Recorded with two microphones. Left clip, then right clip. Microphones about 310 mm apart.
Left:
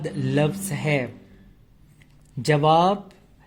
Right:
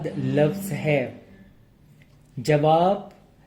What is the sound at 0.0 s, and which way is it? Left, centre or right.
Speech, left.